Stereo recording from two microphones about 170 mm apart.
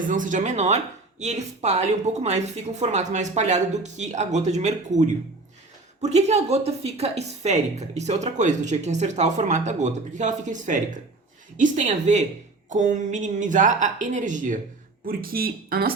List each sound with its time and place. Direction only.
0.1 s speech: 50° right (ahead or behind)
15.0 s speech: 60° right (ahead or behind)